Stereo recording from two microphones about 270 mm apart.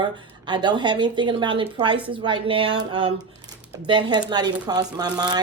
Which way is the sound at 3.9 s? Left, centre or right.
Centre.